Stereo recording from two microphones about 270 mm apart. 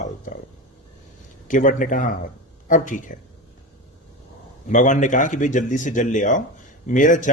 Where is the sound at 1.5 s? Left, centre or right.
Left.